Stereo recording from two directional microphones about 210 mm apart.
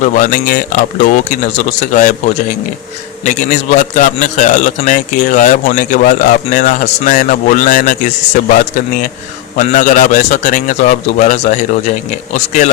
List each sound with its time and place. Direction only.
0.0 s a man's voice: 40° left (ahead or behind)
3.2 s a man's voice: 35° left (ahead or behind)
9.6 s a man's voice: 35° left (ahead or behind)